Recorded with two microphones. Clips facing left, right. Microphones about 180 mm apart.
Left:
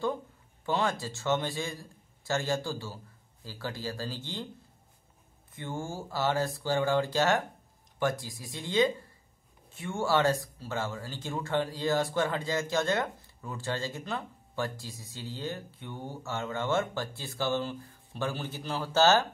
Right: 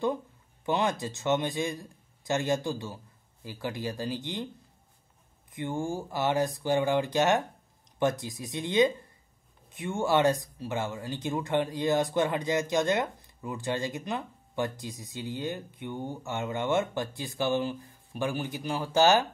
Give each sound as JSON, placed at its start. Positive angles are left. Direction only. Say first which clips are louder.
{"t": 0.7, "sound": "a man's voice", "louder": "right 2 dB", "side_deg": -20}
{"t": 5.5, "sound": "a man's voice", "louder": "right 5 dB", "side_deg": -15}